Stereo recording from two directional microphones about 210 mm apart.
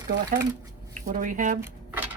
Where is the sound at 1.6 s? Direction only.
10° right (ahead or behind).